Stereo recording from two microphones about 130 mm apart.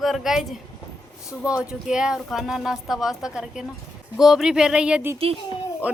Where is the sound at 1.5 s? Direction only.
5° right (ahead or behind).